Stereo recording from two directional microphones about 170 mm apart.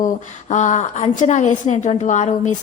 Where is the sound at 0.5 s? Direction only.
45° left (ahead or behind).